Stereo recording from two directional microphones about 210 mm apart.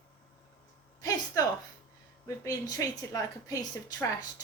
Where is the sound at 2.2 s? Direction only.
15° left (ahead or behind).